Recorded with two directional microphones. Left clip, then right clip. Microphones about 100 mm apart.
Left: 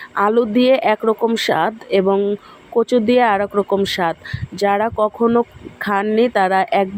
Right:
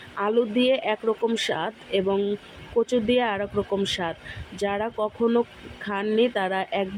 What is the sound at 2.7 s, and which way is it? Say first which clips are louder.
Speech: left 7 dB; 30° left (ahead or behind).